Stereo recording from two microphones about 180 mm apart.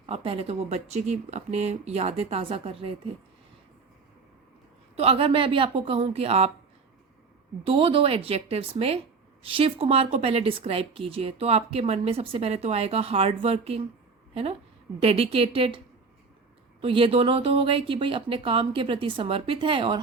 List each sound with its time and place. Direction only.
0.0 s a woman's voice: 30° right (ahead or behind)
4.9 s a woman's voice: 35° right (ahead or behind)
7.6 s a woman's voice: 30° right (ahead or behind)
15.0 s a woman's voice: 30° right (ahead or behind)
16.8 s speech: 30° right (ahead or behind)